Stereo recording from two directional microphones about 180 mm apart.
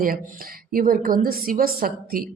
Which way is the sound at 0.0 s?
50° right (ahead or behind).